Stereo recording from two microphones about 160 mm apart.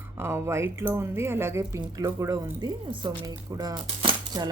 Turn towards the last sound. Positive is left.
turn(degrees=-25)  # may be behind; listen again after turning